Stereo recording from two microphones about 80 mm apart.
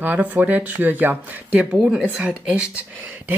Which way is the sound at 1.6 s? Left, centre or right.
Centre.